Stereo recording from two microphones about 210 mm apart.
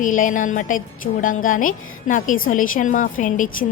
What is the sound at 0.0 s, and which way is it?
A woman's voice, 40° left (ahead or behind).